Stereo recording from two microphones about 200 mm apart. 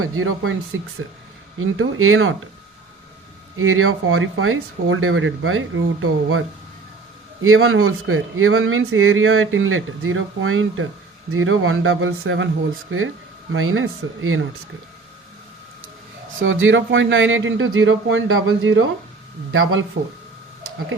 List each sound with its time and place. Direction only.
0.0 s speech: 90° right
3.6 s speech: 90° right
7.4 s speech: 90° right
13.5 s speech: 90° right
16.4 s speech: 75° right (ahead or behind)
19.5 s speech: 90° right